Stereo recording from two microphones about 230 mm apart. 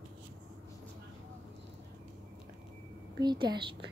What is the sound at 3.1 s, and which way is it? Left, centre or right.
Speech, centre.